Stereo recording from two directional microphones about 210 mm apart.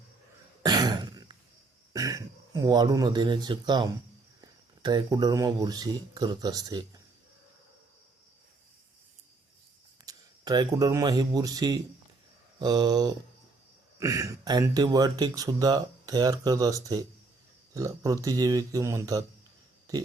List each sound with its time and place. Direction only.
0.6 s throat clearing: 20° right (ahead or behind)
1.9 s speech: 15° right (ahead or behind)
10.1 s speech: 20° right (ahead or behind)